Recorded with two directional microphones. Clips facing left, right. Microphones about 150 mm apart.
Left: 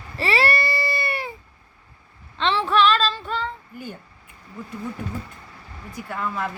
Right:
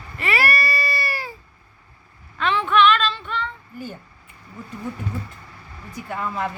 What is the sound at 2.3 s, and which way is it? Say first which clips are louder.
Female singing: right 1 dB; 30° left (ahead or behind).